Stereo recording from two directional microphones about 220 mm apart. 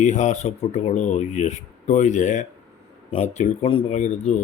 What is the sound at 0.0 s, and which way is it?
Speech, 35° left (ahead or behind).